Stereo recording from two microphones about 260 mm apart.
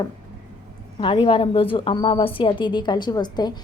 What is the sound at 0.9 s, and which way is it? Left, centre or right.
A woman's voice, centre.